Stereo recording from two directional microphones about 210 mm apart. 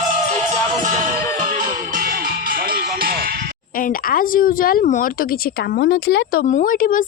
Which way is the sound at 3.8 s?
40° left (ahead or behind).